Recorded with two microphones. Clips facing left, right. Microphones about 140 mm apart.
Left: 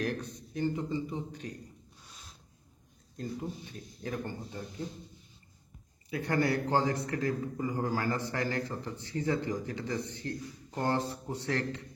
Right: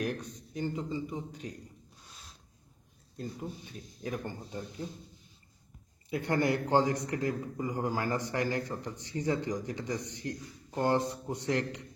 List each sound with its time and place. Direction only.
0.0 s a man's voice: 15° right (ahead or behind)
3.2 s a man's voice: 10° right (ahead or behind)
6.1 s a man's voice: 25° right (ahead or behind)